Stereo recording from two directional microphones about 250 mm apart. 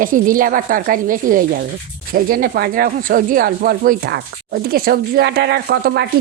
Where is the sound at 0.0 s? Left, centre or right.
Right.